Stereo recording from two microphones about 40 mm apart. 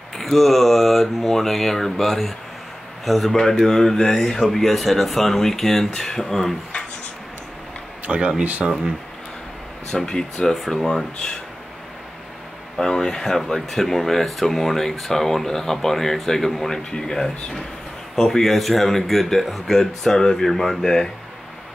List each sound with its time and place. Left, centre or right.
0.2 s speech: centre
8.1 s speech: centre
9.8 s speech: centre
10.5 s speech: centre
12.8 s speech: centre
19.8 s speech: centre